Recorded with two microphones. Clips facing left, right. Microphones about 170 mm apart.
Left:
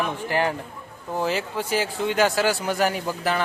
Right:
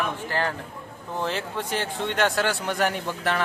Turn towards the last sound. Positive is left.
turn(degrees=5)  # may be behind; listen again after turning